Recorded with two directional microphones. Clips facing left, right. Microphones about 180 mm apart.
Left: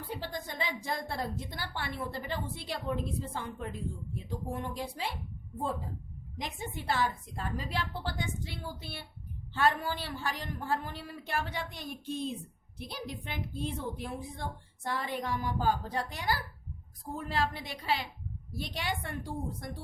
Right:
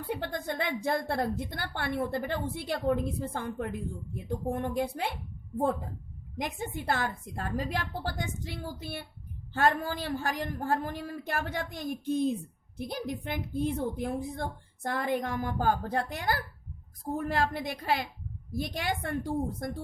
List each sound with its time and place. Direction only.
0.1 s a woman's voice: 60° right (ahead or behind)
6.4 s a woman's voice: 50° right (ahead or behind)